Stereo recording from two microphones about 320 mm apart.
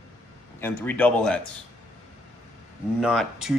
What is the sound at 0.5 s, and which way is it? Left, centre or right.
Speech, centre.